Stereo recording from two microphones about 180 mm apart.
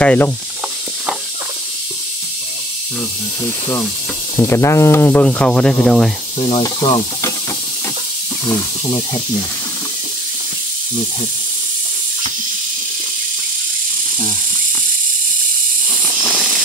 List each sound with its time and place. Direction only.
0.0 s speech: 10° left (ahead or behind)
4.4 s speech: 15° left (ahead or behind)
6.4 s speech: 25° left (ahead or behind)
8.5 s speech: 20° left (ahead or behind)
15.9 s snake: centre (ahead or behind)